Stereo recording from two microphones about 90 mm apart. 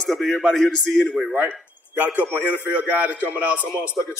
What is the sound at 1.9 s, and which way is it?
A man's voice, 20° right (ahead or behind).